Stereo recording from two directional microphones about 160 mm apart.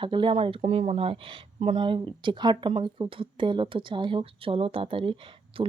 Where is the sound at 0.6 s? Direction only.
45° right (ahead or behind).